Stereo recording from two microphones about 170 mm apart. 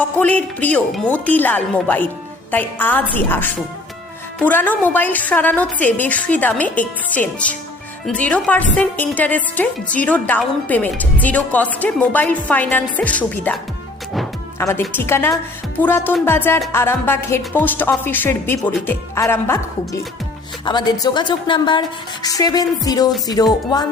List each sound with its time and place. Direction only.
0.2 s a woman's voice: 10° left (ahead or behind)
14.6 s a woman's voice: 15° left (ahead or behind)